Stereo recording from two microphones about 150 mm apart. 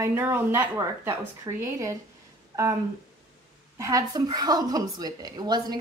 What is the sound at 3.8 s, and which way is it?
A woman's voice, 20° right (ahead or behind).